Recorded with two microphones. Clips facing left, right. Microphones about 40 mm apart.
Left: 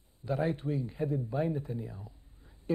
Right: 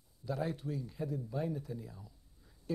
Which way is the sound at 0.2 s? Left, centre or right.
Left.